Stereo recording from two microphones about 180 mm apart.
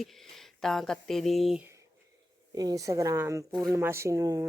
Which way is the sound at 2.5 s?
20° right (ahead or behind).